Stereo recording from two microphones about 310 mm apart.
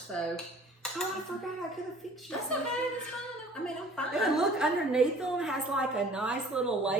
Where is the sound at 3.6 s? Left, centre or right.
Centre.